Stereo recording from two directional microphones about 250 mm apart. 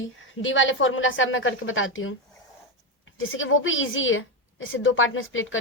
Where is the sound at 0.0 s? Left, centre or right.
Left.